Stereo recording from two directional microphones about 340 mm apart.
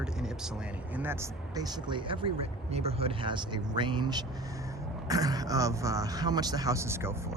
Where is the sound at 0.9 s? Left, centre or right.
Centre.